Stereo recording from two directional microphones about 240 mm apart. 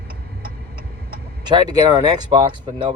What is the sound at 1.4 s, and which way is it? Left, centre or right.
Speech, centre.